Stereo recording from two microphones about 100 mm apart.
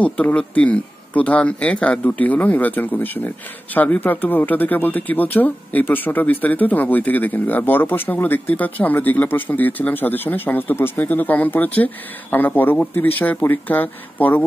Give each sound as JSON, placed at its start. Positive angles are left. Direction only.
{"t": 0.0, "sound": "speech", "side_deg": 15}